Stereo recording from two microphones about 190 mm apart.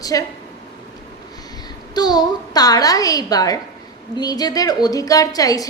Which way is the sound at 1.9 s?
20° left (ahead or behind).